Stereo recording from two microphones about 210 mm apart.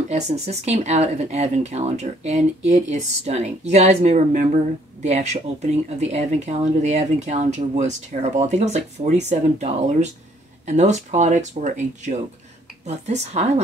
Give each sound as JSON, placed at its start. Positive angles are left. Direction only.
{"t": 0.1, "sound": "speech", "side_deg": -30}